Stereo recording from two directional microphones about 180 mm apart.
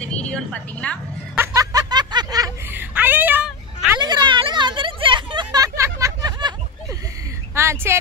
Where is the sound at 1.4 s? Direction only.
20° right (ahead or behind).